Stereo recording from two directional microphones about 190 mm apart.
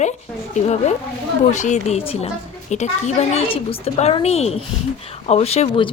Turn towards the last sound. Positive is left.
turn(degrees=30)  # may be behind; listen again after turning